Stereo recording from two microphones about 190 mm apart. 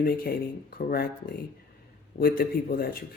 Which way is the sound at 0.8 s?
50° left (ahead or behind).